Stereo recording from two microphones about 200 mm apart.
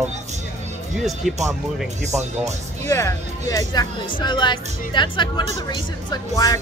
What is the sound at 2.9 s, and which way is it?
Speech, 15° left (ahead or behind).